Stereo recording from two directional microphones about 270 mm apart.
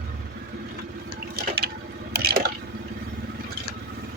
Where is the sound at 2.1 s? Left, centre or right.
Right.